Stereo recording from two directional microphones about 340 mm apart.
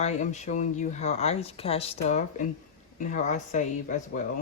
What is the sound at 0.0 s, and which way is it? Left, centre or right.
Speech, left.